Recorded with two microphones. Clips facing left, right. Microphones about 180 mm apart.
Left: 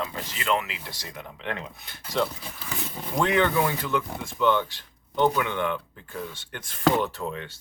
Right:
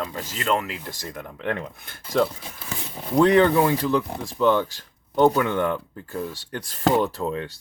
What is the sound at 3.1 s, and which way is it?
Speech, 35° right (ahead or behind).